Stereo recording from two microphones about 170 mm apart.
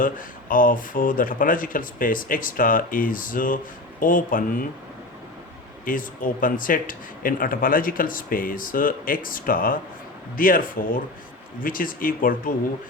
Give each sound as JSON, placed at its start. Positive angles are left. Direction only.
{"t": 0.0, "sound": "speech", "side_deg": 55}
{"t": 5.8, "sound": "speech", "side_deg": 55}